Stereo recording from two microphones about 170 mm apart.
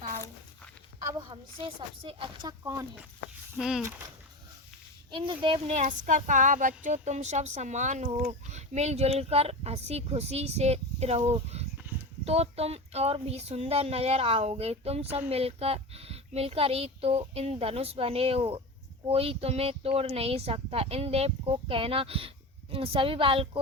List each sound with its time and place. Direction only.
1.3 s a woman's voice: 35° right (ahead or behind)
3.6 s speech: 5° right (ahead or behind)
5.1 s speech: 30° right (ahead or behind)
6.1 s a woman's voice: 50° right (ahead or behind)
11.9 s dog: 10° right (ahead or behind)
12.2 s a woman's voice: 40° right (ahead or behind)